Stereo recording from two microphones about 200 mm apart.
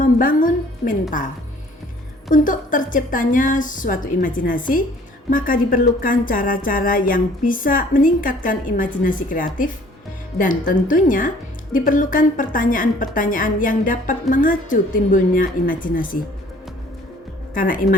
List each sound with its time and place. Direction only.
0.0 s music: 45° left (ahead or behind)
2.3 s a woman's voice: 40° left (ahead or behind)
17.5 s speech: 45° left (ahead or behind)